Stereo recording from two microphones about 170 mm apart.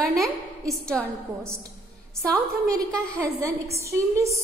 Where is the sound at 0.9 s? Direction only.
15° right (ahead or behind).